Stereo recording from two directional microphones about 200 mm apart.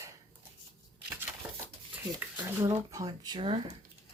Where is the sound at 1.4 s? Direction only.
10° right (ahead or behind).